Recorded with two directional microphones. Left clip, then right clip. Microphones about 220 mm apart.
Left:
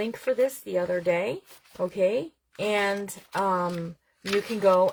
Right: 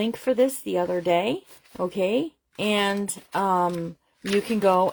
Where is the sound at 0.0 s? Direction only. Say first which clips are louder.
Right 3 dB; 35° right (ahead or behind).